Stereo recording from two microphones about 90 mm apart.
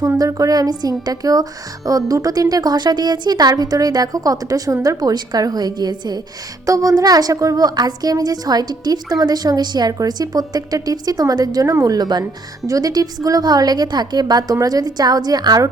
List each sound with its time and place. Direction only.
0.2 s speech: 40° right (ahead or behind)
6.7 s speech: 40° right (ahead or behind)
11.9 s speech: 55° right (ahead or behind)
12.6 s speech: 40° right (ahead or behind)